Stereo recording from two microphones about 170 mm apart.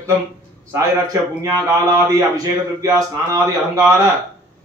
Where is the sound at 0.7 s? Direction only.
20° right (ahead or behind).